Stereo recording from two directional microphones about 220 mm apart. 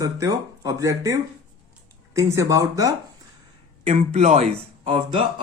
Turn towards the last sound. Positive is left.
turn(degrees=-30)  # may be behind; listen again after turning